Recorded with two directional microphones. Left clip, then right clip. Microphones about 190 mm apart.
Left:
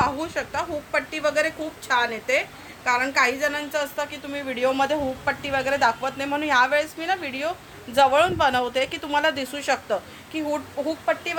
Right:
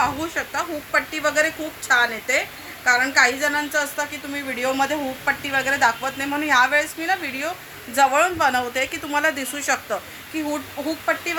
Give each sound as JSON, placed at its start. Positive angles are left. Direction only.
{"t": 0.0, "sound": "a woman's voice", "side_deg": 45}